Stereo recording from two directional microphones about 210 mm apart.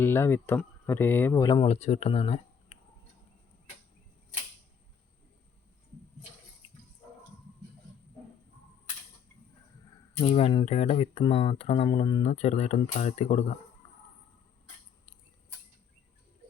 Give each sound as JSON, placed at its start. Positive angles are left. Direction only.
{"t": 0.0, "sound": "speech", "side_deg": 10}
{"t": 10.2, "sound": "speech", "side_deg": 30}